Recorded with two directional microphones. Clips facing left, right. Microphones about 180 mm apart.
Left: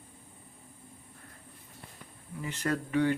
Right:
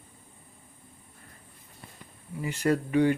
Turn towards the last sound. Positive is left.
turn(degrees=-15)  # may be behind; listen again after turning